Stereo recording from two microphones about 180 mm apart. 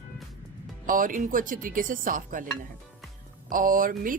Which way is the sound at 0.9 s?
50° right (ahead or behind).